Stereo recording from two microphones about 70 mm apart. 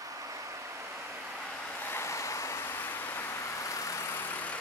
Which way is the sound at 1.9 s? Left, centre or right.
Left.